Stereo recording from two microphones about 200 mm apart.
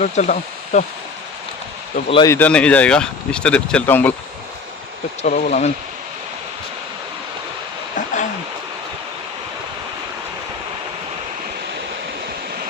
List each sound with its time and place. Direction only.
0.0 s speech: 40° left (ahead or behind)
2.0 s speech: 25° left (ahead or behind)
2.3 s speech: 5° left (ahead or behind)
5.2 s speech: 40° left (ahead or behind)
7.9 s a sound: 40° left (ahead or behind)